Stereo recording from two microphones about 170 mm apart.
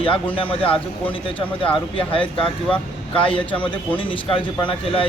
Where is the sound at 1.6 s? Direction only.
30° left (ahead or behind).